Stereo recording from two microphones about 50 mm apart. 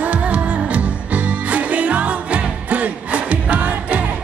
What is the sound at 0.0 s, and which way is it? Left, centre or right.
Music, right.